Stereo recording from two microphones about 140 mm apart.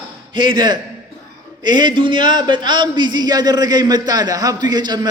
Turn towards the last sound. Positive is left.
turn(degrees=-30)  # may be behind; listen again after turning